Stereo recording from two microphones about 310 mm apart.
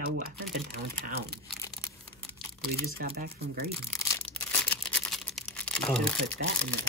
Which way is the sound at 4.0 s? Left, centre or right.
Centre.